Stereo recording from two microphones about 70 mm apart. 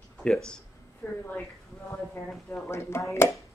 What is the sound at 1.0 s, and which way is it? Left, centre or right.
Speech, left.